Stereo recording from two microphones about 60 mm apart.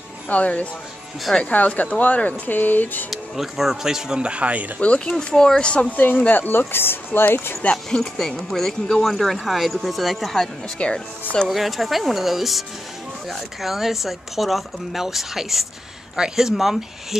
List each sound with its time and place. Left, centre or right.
0.3 s speech: left
3.1 s speech: centre; by 4.6 s right
4.7 s speech: centre
6.2 s speech: left
7.7 s speech: centre
10.8 s speech: centre
11.4 s speech: centre